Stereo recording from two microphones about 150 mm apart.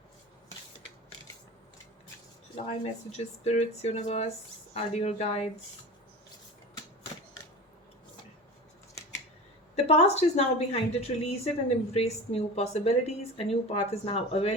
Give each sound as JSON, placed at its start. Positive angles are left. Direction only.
{"t": 2.6, "sound": "speech", "side_deg": 45}
{"t": 9.7, "sound": "speech", "side_deg": 45}